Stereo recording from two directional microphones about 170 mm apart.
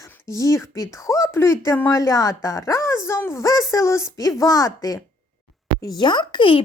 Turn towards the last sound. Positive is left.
turn(degrees=30)  # may be behind; listen again after turning